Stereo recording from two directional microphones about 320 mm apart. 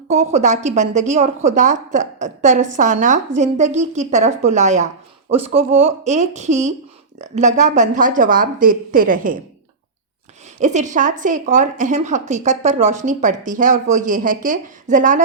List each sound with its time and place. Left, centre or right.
0.1 s a woman's voice: right
10.6 s a woman's voice: right